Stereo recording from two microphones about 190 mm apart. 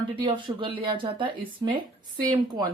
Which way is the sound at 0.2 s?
25° right (ahead or behind).